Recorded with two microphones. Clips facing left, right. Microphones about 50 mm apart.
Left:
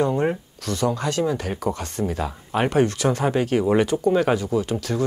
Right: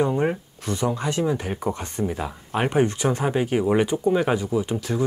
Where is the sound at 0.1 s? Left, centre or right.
Centre.